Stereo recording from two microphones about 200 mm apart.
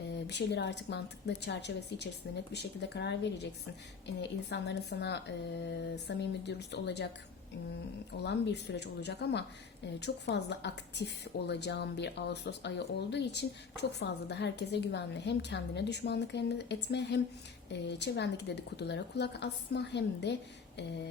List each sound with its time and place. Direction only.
0.3 s a woman's voice: 60° left (ahead or behind)
8.2 s a woman's voice: 60° left (ahead or behind)